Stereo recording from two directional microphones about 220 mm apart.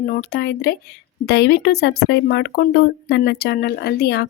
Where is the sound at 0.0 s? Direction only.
45° left (ahead or behind).